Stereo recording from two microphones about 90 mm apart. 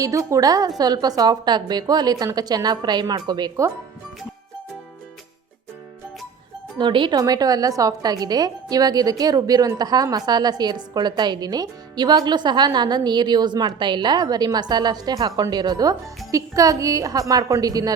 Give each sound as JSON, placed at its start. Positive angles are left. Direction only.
{"t": 0.0, "sound": "a woman's voice", "side_deg": -35}
{"t": 6.7, "sound": "speech", "side_deg": -60}
{"t": 7.2, "sound": "a woman's voice", "side_deg": -45}